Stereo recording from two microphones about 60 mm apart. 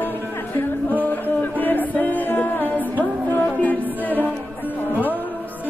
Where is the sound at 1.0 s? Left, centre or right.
Left.